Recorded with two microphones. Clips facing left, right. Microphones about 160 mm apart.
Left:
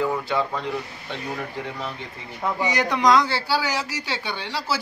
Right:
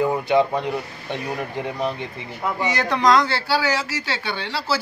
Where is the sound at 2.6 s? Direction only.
15° left (ahead or behind).